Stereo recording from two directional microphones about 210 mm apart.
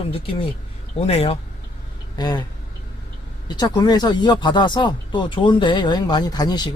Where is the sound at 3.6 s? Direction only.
20° left (ahead or behind).